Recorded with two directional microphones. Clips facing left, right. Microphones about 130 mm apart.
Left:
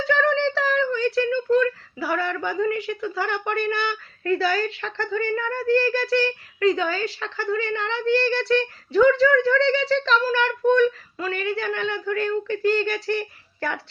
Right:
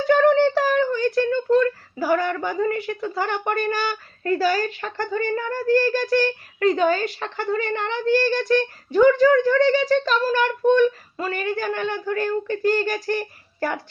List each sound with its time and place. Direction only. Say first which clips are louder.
0.2 s a sound: right 5 dB; 40° right (ahead or behind)
2.6 s a woman's voice: right 1 dB; 35° right (ahead or behind)
7.3 s a woman's voice: right 1 dB; 20° right (ahead or behind)
7.7 s a woman's voice: right 2 dB; 40° right (ahead or behind)
10.7 s speech: right 1 dB; 15° right (ahead or behind)
11.2 s a woman's voice: right 1 dB; 40° right (ahead or behind)